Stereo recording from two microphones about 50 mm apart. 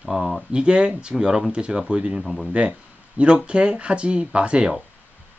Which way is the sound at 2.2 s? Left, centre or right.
Centre.